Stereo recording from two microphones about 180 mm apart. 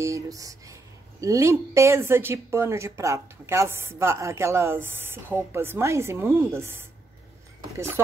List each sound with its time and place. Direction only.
0.0 s a woman's voice: 20° right (ahead or behind)